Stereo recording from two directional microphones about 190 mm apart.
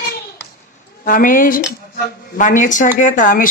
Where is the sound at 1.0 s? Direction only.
45° left (ahead or behind).